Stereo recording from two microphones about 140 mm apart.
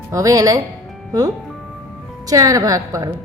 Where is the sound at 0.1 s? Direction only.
25° right (ahead or behind).